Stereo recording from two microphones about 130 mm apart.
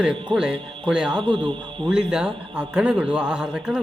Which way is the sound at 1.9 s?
5° right (ahead or behind).